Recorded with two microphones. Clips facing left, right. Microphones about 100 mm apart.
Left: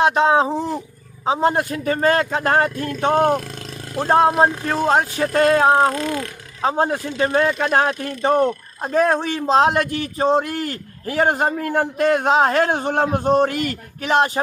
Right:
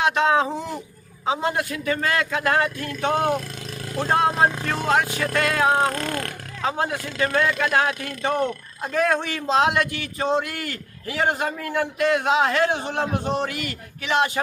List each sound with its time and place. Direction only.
0.0 s speech: 30° left (ahead or behind)
5.9 s speech: 50° right (ahead or behind)
6.6 s speech: 35° left (ahead or behind)